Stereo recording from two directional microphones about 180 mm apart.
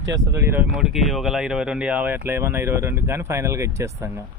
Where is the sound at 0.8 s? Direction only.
Centre (ahead or behind).